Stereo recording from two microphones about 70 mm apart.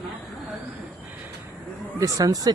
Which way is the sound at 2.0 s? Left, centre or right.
Right.